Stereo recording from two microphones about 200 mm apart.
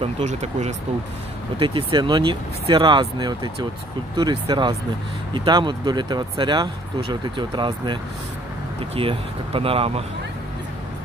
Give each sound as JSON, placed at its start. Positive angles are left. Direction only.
{"t": 0.0, "sound": "speech", "side_deg": -35}